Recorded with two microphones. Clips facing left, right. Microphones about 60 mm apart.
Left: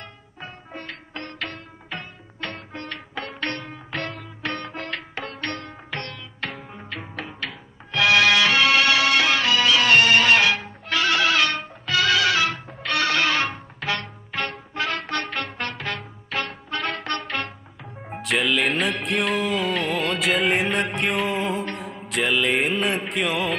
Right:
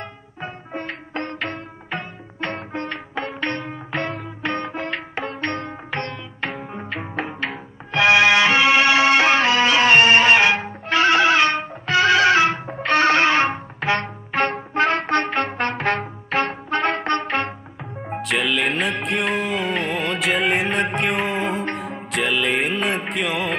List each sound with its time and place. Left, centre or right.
0.4 s music: right
18.2 s music: centre